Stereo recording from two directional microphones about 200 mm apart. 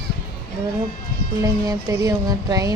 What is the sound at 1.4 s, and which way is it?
Music, 15° right (ahead or behind).